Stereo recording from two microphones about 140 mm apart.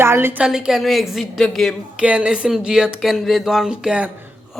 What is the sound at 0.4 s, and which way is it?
Speech, 5° right (ahead or behind).